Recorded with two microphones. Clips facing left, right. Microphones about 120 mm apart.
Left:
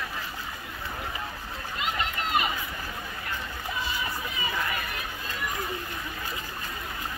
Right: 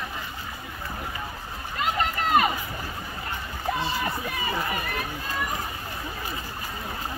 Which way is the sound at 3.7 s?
65° right (ahead or behind).